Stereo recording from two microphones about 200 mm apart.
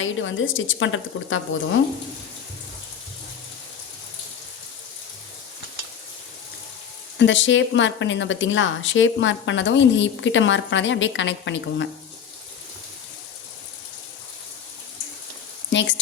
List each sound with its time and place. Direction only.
0.0 s speech: 75° left (ahead or behind)
7.2 s speech: 65° left (ahead or behind)
15.7 s frying: 65° left (ahead or behind)